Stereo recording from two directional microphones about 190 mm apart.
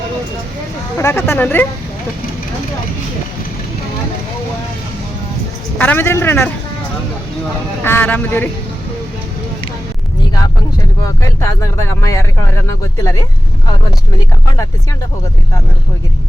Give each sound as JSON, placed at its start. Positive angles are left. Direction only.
{"t": 0.9, "sound": "speech", "side_deg": 15}
{"t": 5.7, "sound": "speech", "side_deg": 10}
{"t": 7.9, "sound": "speech", "side_deg": 10}
{"t": 11.0, "sound": "speech", "side_deg": 15}